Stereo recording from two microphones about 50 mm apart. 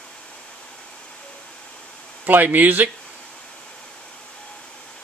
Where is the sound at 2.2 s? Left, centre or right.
Right.